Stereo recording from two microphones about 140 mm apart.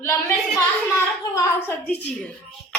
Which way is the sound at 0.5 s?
20° left (ahead or behind).